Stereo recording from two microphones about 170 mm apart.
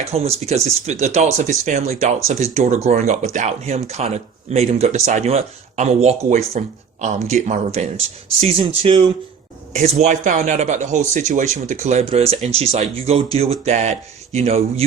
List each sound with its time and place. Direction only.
0.0 s speech: 35° right (ahead or behind)
9.7 s speech: 40° right (ahead or behind)